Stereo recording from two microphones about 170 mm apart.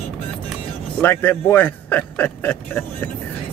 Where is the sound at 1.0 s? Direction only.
10° left (ahead or behind).